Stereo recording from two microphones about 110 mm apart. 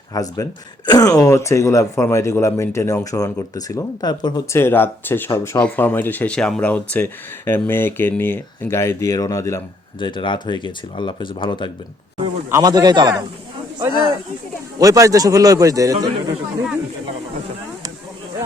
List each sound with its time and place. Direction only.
0.1 s speech: 35° left (ahead or behind)
4.5 s speech: 20° left (ahead or behind)
10.0 s speech: 45° left (ahead or behind)
12.5 s a man's voice: 30° right (ahead or behind)
14.8 s a man's voice: 30° right (ahead or behind)